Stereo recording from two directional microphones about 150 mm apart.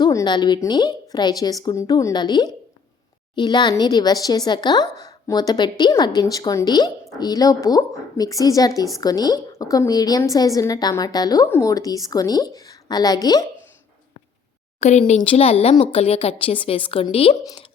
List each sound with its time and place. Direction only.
0.0 s a woman's voice: 25° left (ahead or behind)
14.8 s a woman's voice: 50° left (ahead or behind); by 17.7 s 30° left (ahead or behind)